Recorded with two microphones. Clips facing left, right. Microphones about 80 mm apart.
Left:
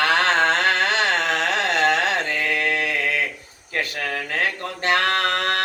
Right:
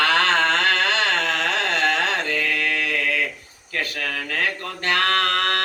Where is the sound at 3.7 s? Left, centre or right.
Left.